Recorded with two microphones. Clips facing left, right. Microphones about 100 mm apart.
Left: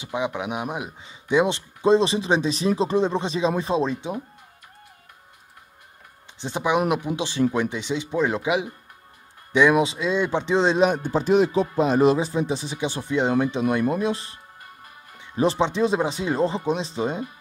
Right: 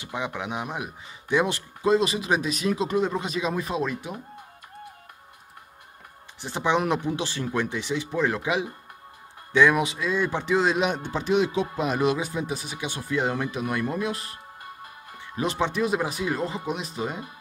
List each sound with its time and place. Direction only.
0.0 s speech: 20° left (ahead or behind)
6.4 s speech: 15° left (ahead or behind)
10.9 s speech: 45° left (ahead or behind); by 17.3 s 25° left (ahead or behind)